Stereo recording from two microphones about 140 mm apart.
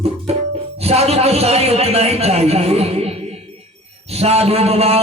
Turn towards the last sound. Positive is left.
turn(degrees=-45)  # may be behind; listen again after turning